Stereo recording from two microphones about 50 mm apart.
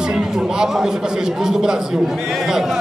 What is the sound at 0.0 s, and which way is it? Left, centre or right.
A man's voice, centre.